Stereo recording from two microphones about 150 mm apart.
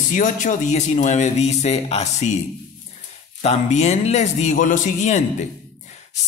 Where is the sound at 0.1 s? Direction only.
60° left (ahead or behind).